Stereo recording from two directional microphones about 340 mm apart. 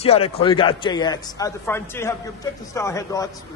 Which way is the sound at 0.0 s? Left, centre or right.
Centre.